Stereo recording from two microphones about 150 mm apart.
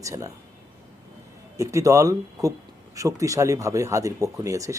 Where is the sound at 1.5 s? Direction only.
20° right (ahead or behind).